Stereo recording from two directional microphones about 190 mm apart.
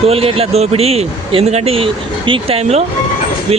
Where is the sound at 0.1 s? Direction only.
30° right (ahead or behind).